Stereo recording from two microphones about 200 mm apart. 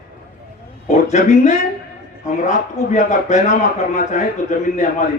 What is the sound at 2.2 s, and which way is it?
Speech, 35° left (ahead or behind).